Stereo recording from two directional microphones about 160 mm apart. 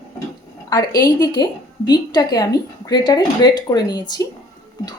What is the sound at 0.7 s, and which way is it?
A woman's voice, 25° left (ahead or behind).